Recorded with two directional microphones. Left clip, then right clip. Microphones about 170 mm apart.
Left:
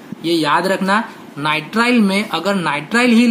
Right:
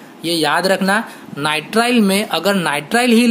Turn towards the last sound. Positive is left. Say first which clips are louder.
# even
turn(degrees=-50)  # may be behind; listen again after turning